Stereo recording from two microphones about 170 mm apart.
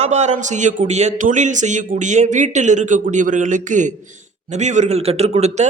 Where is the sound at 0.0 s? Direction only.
40° right (ahead or behind).